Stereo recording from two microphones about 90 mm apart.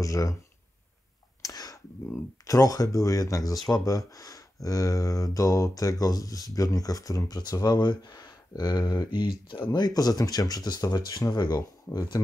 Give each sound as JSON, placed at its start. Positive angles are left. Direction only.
{"t": 0.0, "sound": "speech", "side_deg": 40}
{"t": 1.4, "sound": "sneeze", "side_deg": 45}
{"t": 2.4, "sound": "speech", "side_deg": 40}
{"t": 9.7, "sound": "speech", "side_deg": 45}